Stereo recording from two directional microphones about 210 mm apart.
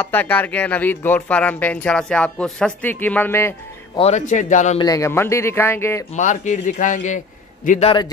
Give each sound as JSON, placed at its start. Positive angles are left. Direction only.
{"t": 0.0, "sound": "speech", "side_deg": 10}
{"t": 4.0, "sound": "a man's voice", "side_deg": 35}
{"t": 4.7, "sound": "speech", "side_deg": 15}
{"t": 6.1, "sound": "a man's voice", "side_deg": 35}